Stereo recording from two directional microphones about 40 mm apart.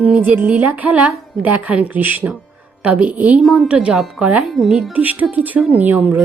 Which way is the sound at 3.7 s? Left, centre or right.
Right.